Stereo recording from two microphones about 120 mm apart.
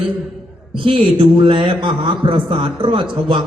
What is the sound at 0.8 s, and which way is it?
A man's voice, 45° right (ahead or behind).